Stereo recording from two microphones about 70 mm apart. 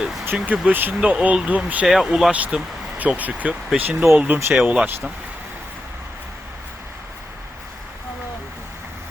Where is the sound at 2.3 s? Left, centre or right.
Right.